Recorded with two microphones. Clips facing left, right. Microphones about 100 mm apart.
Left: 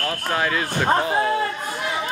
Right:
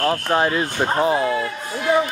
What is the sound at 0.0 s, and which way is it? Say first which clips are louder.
Speech: right 5 dB; 30° right (ahead or behind).